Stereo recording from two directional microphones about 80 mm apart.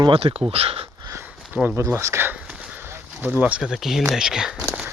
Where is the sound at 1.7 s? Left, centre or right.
Right.